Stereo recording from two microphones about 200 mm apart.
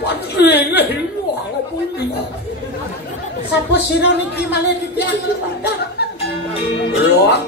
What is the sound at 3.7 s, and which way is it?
Speech, 55° left (ahead or behind).